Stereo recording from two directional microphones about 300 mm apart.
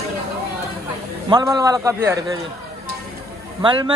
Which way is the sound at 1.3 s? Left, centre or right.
Centre.